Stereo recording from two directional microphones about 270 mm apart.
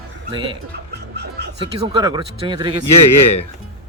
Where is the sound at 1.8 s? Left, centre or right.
Centre.